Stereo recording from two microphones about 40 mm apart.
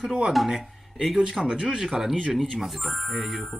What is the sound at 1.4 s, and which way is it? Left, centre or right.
Speech, right.